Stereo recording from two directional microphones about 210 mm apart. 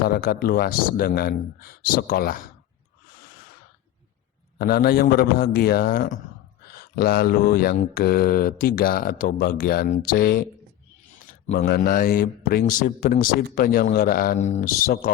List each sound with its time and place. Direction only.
0.1 s mantra: 45° left (ahead or behind)
4.5 s mantra: 45° left (ahead or behind)
11.5 s mantra: 50° left (ahead or behind)